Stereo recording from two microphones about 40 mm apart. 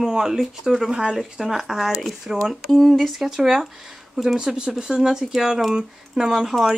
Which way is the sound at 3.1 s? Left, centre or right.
Centre.